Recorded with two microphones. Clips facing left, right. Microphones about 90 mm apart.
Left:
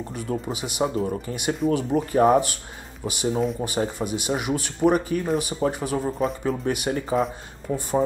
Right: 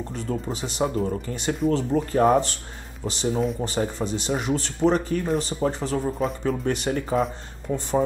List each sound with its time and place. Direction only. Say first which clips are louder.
0.1 s speech: left 1 dB; 15° left (ahead or behind)